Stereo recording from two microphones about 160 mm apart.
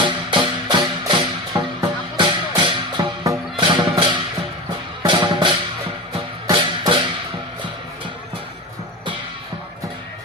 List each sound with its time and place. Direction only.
0.0 s music: 30° right (ahead or behind)